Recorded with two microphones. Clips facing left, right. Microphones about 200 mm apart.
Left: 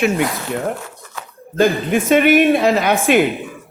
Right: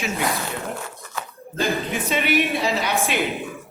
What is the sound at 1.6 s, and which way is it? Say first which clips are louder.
A man's voice: left 9 dB; 50° left (ahead or behind).